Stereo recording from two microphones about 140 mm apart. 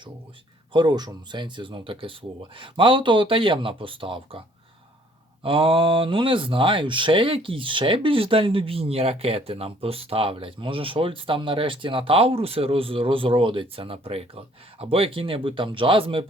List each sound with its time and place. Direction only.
0.7 s speech: 35° right (ahead or behind)